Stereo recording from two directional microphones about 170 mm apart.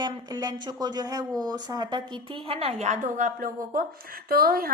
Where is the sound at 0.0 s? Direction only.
25° right (ahead or behind).